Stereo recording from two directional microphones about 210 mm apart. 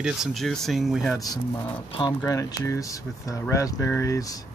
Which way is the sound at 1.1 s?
15° left (ahead or behind).